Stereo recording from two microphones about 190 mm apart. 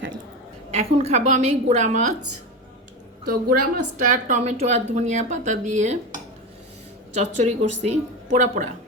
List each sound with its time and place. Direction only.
0.7 s speech: 35° right (ahead or behind)
3.5 s speech: 45° right (ahead or behind)
7.1 s speech: 35° right (ahead or behind)